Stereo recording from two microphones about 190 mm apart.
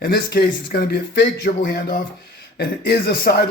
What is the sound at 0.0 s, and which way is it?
Speech, 55° left (ahead or behind).